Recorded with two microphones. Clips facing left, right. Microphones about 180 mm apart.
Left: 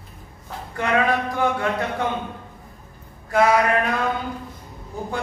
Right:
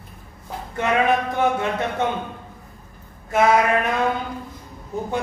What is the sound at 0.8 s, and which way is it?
Speech, 20° right (ahead or behind).